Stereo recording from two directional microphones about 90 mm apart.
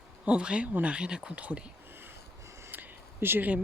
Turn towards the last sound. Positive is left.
turn(degrees=-20)  # may be behind; listen again after turning